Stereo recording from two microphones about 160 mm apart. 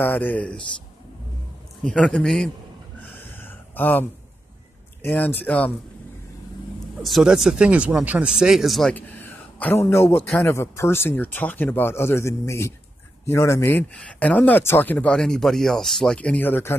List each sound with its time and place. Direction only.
0.0 s speech: 10° left (ahead or behind)
1.9 s speech: 5° left (ahead or behind)
3.0 s a sound: 10° left (ahead or behind)
5.0 s speech: 10° left (ahead or behind)
7.0 s speech: centre (ahead or behind)
8.9 s a sound: 10° left (ahead or behind)
9.8 s speech: 15° left (ahead or behind)